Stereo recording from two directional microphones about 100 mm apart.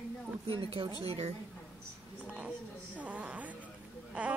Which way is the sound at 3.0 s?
15° right (ahead or behind).